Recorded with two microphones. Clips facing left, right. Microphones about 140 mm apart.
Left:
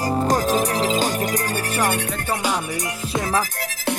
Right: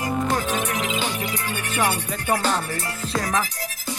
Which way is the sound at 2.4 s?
10° left (ahead or behind).